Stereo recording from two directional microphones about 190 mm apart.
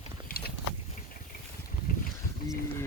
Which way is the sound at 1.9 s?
50° left (ahead or behind).